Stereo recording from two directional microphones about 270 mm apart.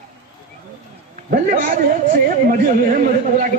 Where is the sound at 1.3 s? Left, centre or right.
Right.